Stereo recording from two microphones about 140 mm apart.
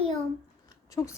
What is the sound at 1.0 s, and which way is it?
Speech, 20° left (ahead or behind).